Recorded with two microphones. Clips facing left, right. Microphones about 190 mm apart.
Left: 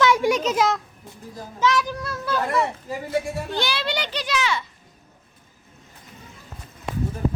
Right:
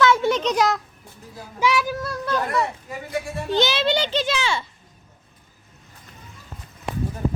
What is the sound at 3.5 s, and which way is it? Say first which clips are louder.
A child's voice: right 8 dB; 20° right (ahead or behind).